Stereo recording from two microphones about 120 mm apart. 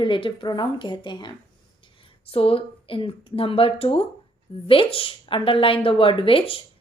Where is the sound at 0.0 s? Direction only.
45° left (ahead or behind).